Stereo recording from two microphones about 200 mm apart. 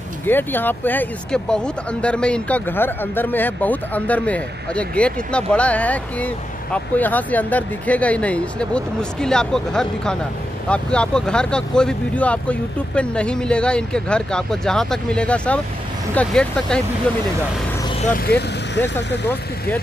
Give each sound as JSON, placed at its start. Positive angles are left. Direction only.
{"t": 0.3, "sound": "speech", "side_deg": 10}
{"t": 18.0, "sound": "speech", "side_deg": 45}
{"t": 18.3, "sound": "speech", "side_deg": 10}